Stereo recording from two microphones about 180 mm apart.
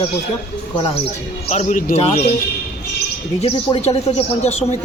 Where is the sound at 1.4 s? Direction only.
40° left (ahead or behind).